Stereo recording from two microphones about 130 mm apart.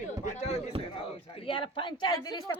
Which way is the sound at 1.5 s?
40° left (ahead or behind).